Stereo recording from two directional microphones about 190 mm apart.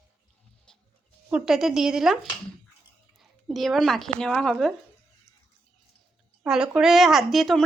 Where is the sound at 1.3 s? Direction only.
5° right (ahead or behind).